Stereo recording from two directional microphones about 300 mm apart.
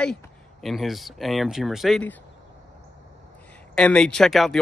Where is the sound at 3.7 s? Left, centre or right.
Centre.